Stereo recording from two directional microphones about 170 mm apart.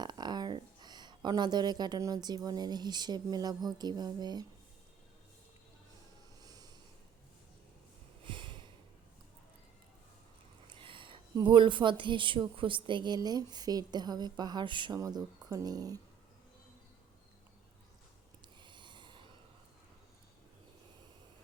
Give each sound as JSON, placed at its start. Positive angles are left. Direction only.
{"t": 0.0, "sound": "a woman's voice", "side_deg": -25}
{"t": 6.4, "sound": "snort", "side_deg": -25}
{"t": 8.2, "sound": "sniff", "side_deg": -30}
{"t": 10.7, "sound": "speech", "side_deg": -30}
{"t": 18.4, "sound": "snort", "side_deg": -30}